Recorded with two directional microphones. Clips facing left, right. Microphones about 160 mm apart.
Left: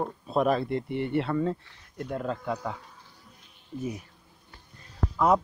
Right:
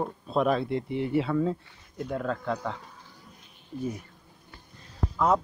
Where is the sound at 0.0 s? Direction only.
5° left (ahead or behind).